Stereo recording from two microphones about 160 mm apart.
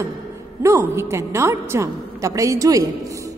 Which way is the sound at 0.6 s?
20° right (ahead or behind).